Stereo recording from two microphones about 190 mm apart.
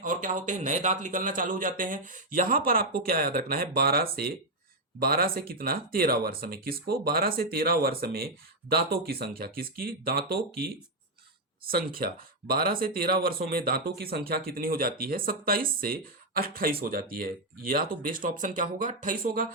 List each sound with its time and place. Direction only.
0.0 s speech: 45° right (ahead or behind)